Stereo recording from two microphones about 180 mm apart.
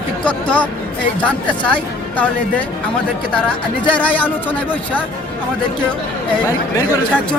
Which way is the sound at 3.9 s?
10° left (ahead or behind).